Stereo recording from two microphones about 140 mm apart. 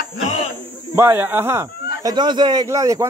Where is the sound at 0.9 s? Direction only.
15° right (ahead or behind).